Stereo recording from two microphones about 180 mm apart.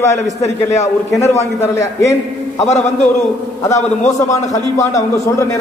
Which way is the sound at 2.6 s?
40° left (ahead or behind).